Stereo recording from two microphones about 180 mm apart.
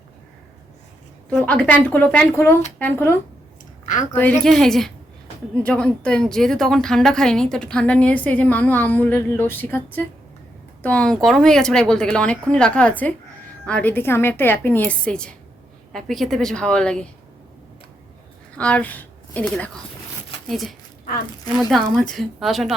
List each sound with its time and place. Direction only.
1.3 s a woman's voice: 5° left (ahead or behind)
18.5 s a woman's voice: 10° left (ahead or behind)